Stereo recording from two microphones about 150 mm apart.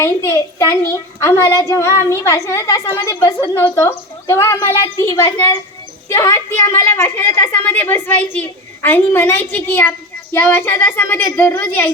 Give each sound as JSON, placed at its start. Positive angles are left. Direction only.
{"t": 0.0, "sound": "a woman's voice", "side_deg": 20}